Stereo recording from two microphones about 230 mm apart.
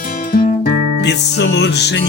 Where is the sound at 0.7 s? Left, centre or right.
Right.